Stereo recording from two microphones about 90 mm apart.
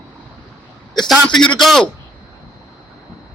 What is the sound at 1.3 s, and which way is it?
Speech, 5° left (ahead or behind).